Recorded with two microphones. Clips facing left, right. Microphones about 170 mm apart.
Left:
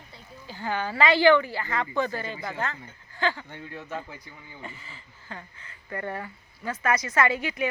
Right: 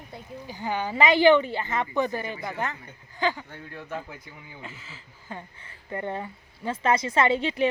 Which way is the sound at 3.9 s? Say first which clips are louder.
Right 3 dB; centre (ahead or behind).